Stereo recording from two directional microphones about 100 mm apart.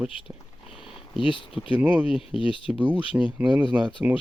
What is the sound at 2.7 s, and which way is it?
Speech, 15° right (ahead or behind).